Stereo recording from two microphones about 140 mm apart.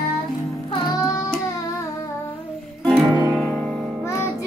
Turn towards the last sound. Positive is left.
turn(degrees=5)  # may be behind; listen again after turning